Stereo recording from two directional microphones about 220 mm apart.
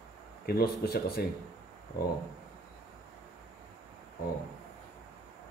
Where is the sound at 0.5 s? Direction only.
45° left (ahead or behind).